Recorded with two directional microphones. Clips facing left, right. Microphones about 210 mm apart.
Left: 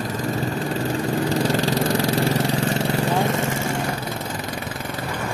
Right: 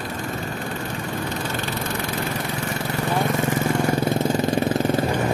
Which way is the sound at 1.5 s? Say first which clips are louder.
Left 7 dB; 90° left.